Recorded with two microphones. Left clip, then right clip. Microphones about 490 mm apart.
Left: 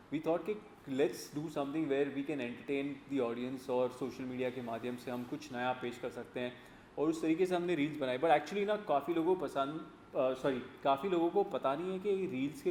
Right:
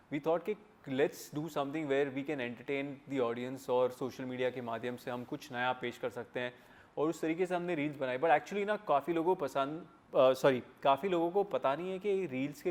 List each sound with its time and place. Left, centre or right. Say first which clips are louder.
0.1 s a man's voice: right 2 dB; right
10.9 s speech: right 1 dB; right